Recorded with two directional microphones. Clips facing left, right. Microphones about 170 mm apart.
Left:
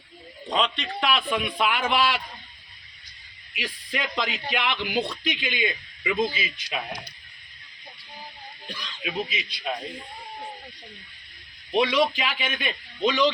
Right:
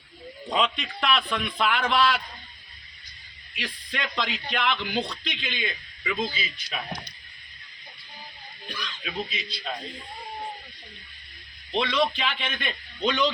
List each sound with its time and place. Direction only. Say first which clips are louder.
0.5 s a man's voice: even; 5° right (ahead or behind)
3.5 s a man's voice: left 2 dB; 5° left (ahead or behind)
9.0 s a man's voice: left 4 dB; 15° left (ahead or behind)
11.7 s a man's voice: left 3 dB; 10° left (ahead or behind)